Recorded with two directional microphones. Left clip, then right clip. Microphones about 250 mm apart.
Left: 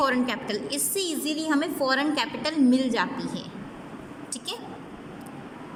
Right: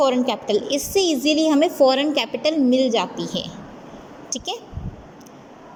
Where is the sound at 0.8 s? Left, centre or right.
Centre.